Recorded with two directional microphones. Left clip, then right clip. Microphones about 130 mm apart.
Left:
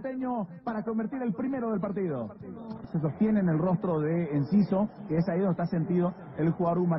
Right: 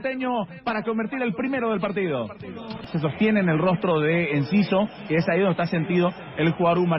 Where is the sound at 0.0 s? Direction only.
35° right (ahead or behind).